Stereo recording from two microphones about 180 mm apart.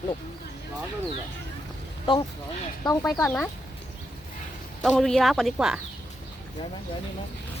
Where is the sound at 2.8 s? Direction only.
15° left (ahead or behind).